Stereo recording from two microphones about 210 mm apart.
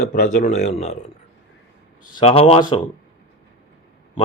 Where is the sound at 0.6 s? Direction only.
30° left (ahead or behind).